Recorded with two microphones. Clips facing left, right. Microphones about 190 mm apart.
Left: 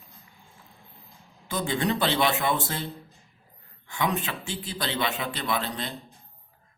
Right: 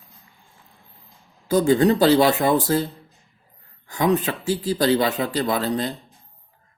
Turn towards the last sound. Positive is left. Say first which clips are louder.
# right 7 dB
turn(degrees=-40)  # may be behind; listen again after turning